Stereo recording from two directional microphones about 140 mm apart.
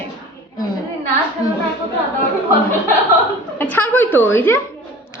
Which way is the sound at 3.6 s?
15° left (ahead or behind).